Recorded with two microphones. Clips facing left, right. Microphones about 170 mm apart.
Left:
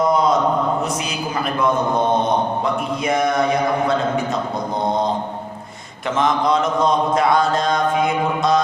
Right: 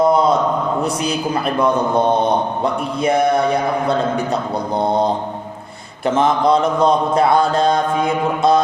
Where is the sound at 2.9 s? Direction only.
30° right (ahead or behind).